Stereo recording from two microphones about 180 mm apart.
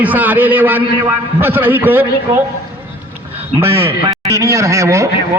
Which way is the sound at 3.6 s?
15° right (ahead or behind).